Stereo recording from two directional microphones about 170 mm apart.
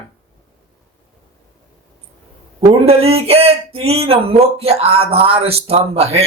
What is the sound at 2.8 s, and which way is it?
Speech, 35° right (ahead or behind).